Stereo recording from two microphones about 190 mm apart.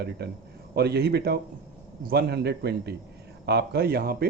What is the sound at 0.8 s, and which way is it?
Speech, 55° right (ahead or behind).